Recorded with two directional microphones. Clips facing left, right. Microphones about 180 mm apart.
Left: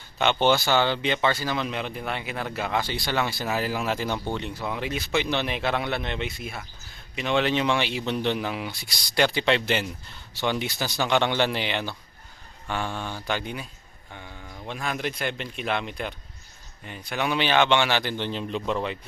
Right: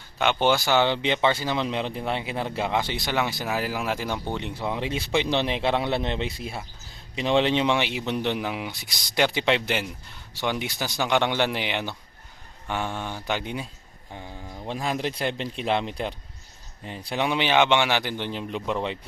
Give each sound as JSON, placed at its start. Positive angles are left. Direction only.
{"t": 0.2, "sound": "speech", "side_deg": -10}